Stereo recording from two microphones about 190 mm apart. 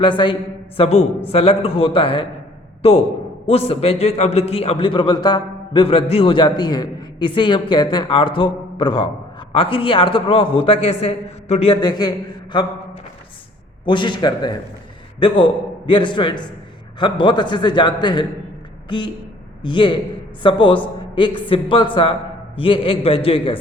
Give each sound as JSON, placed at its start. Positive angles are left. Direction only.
{"t": 0.0, "sound": "a man's voice", "side_deg": 25}
{"t": 13.8, "sound": "speech", "side_deg": 25}